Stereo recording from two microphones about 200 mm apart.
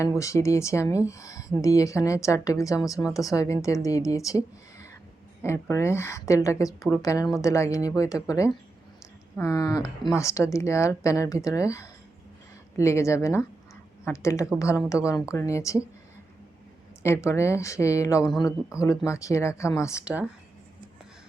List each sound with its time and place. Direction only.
0.2 s a woman's voice: 15° left (ahead or behind)
17.0 s a woman's voice: 15° left (ahead or behind)